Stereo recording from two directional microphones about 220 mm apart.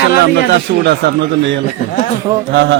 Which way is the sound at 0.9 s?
50° right (ahead or behind).